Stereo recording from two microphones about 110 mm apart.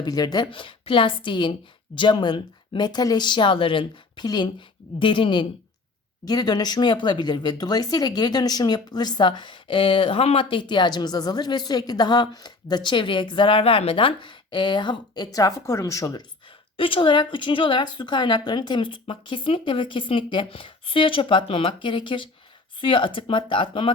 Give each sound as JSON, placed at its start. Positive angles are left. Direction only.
{"t": 0.0, "sound": "speech", "side_deg": 35}
{"t": 16.7, "sound": "speech", "side_deg": 50}